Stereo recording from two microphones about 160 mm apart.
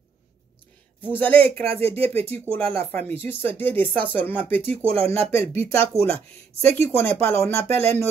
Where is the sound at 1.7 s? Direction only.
35° right (ahead or behind).